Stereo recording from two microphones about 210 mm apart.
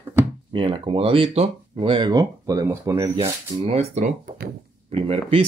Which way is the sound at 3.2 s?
30° right (ahead or behind).